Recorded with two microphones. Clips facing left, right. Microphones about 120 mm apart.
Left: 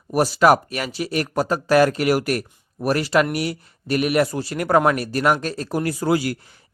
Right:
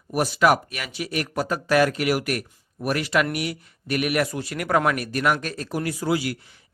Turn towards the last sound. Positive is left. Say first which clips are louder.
# left 4 dB
turn(degrees=45)  # may be behind; listen again after turning